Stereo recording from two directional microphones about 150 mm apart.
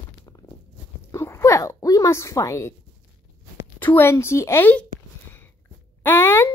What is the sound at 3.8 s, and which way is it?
Speech, 15° left (ahead or behind).